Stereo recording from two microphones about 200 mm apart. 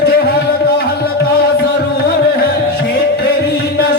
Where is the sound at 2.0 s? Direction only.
50° left (ahead or behind).